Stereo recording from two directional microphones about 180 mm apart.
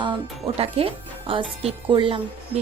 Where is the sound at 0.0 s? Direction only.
30° right (ahead or behind).